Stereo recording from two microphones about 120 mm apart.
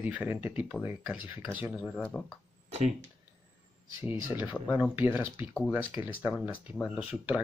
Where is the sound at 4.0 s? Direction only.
15° right (ahead or behind).